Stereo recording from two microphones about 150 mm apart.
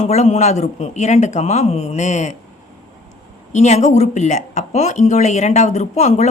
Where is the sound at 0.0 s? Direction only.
45° left (ahead or behind).